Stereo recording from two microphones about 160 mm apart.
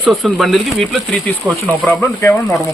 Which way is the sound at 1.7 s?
10° left (ahead or behind).